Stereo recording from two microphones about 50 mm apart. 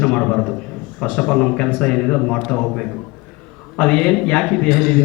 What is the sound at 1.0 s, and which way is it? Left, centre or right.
Speech, left.